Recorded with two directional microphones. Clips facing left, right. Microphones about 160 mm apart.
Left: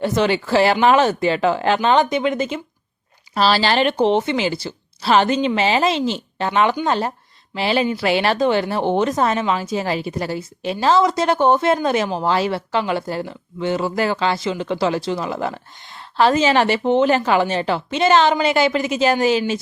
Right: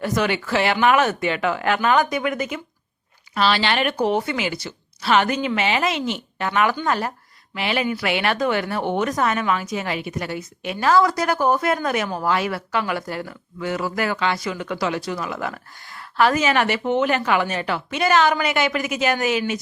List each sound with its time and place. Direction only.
0.0 s speech: 30° left (ahead or behind)